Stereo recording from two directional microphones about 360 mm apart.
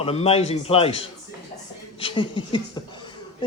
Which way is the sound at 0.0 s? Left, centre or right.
Centre.